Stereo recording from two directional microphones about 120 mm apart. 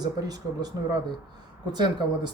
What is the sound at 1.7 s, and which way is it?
Speech, 35° right (ahead or behind).